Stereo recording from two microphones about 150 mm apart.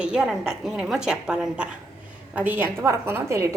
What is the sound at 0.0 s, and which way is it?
A woman's voice, 5° right (ahead or behind).